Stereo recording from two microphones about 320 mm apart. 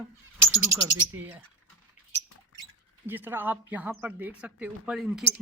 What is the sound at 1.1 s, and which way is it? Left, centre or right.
Speech, centre.